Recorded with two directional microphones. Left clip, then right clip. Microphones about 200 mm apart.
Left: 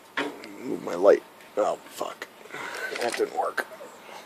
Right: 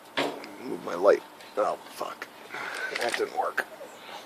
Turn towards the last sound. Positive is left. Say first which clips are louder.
# left 2 dB
turn(degrees=25)  # may be behind; listen again after turning